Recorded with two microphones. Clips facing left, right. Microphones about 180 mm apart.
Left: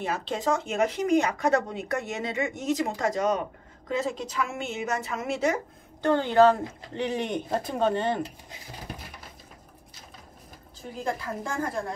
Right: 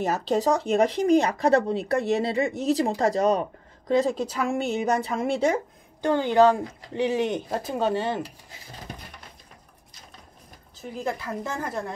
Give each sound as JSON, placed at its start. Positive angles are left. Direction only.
{"t": 0.0, "sound": "speech", "side_deg": -40}
{"t": 6.0, "sound": "speech", "side_deg": -15}
{"t": 11.4, "sound": "speech", "side_deg": -20}